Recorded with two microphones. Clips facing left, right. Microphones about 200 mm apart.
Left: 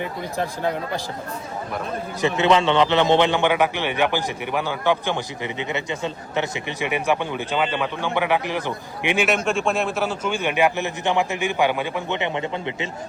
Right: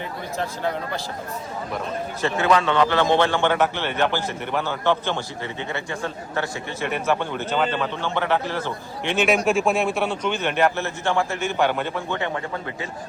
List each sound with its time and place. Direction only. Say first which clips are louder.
0.0 s a man's voice: left 2 dB; 15° left (ahead or behind)
2.2 s a man's voice: left 2 dB; 20° left (ahead or behind)
9.2 s a man's voice: right 5 dB; centre (ahead or behind); by 12.9 s 20° left (ahead or behind)